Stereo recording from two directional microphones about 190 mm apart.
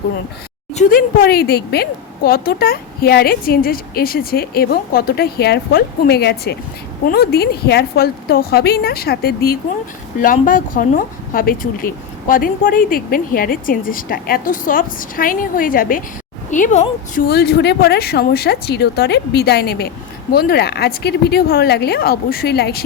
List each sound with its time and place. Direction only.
0.7 s a woman's voice: 40° left (ahead or behind)
17.2 s speech: 55° left (ahead or behind)